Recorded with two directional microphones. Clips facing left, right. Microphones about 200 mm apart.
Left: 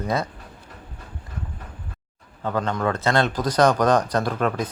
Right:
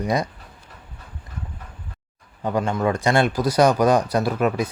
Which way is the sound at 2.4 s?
10° right (ahead or behind).